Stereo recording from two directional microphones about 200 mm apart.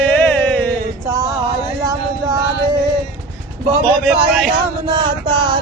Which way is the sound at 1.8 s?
15° right (ahead or behind).